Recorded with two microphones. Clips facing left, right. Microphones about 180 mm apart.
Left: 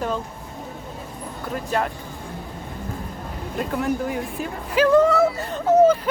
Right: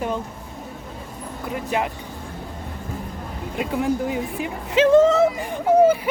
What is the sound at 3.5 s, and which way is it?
Speech, 10° right (ahead or behind).